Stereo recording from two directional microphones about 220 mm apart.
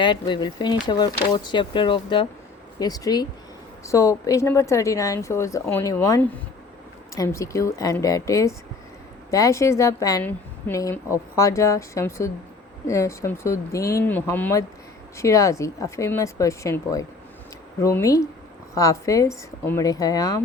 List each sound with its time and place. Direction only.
0.0 s a woman's voice: 20° left (ahead or behind)